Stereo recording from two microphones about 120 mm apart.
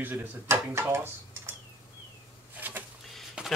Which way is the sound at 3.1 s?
Centre (ahead or behind).